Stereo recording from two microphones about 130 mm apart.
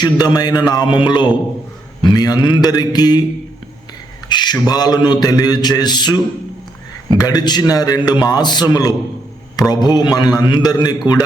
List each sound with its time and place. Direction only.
0.0 s a man's voice: 30° left (ahead or behind)
4.3 s a sound: 35° left (ahead or behind)
4.5 s a man's voice: 30° left (ahead or behind)
7.2 s a man's voice: 30° left (ahead or behind)